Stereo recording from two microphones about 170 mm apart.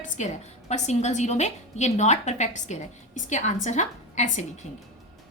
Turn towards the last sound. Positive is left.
turn(degrees=45)  # may be behind; listen again after turning